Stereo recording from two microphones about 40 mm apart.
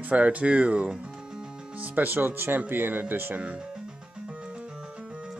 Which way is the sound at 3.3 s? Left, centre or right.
Right.